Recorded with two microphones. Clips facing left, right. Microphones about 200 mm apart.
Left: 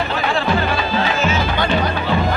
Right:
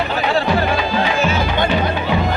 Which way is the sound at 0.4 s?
15° right (ahead or behind).